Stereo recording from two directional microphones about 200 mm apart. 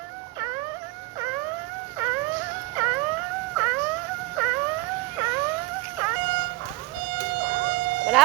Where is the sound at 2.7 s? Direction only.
10° right (ahead or behind).